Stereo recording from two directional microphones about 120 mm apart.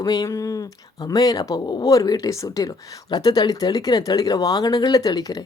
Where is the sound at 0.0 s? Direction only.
35° left (ahead or behind).